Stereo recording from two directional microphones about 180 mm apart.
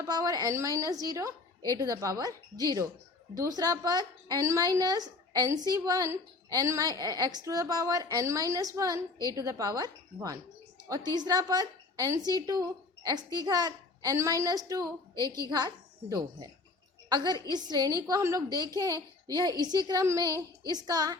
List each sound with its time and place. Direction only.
0.0 s a woman's voice: 20° right (ahead or behind)